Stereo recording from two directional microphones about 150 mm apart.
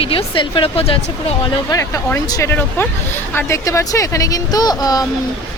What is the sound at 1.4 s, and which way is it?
Speech, 25° left (ahead or behind).